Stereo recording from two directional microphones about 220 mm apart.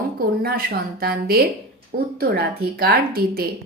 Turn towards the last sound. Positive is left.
turn(degrees=-40)  # may be behind; listen again after turning